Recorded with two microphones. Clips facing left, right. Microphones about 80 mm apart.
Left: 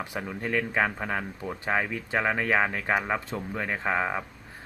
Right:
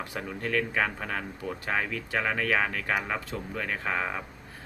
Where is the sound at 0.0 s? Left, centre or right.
Centre.